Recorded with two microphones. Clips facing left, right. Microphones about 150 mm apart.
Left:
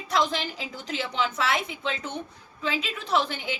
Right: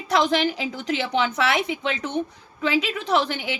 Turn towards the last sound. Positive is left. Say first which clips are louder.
# right 4 dB
turn(degrees=-75)  # may be behind; listen again after turning